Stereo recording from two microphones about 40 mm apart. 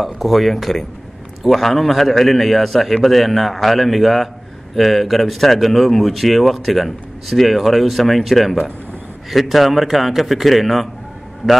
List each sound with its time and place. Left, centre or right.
0.0 s speech: centre